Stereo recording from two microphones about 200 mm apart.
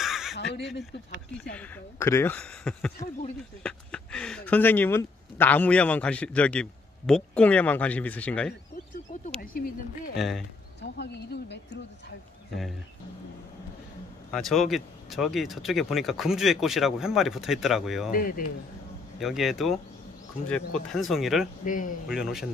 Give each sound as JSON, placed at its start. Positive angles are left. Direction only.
{"t": 0.0, "sound": "a sound", "side_deg": 0}
{"t": 1.3, "sound": "speech", "side_deg": 5}
{"t": 9.2, "sound": "a sound", "side_deg": 45}
{"t": 10.1, "sound": "speech", "side_deg": 0}
{"t": 10.8, "sound": "speech", "side_deg": 55}
{"t": 14.3, "sound": "speech", "side_deg": 0}
{"t": 18.1, "sound": "speech", "side_deg": 45}
{"t": 19.1, "sound": "speech", "side_deg": 0}
{"t": 21.6, "sound": "speech", "side_deg": 40}
{"t": 22.0, "sound": "speech", "side_deg": 0}